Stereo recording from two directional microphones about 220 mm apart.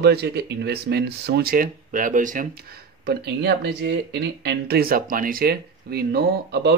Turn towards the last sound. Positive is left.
turn(degrees=-45)  # may be behind; listen again after turning